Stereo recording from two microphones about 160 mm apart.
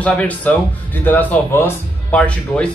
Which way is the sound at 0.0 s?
10° left (ahead or behind).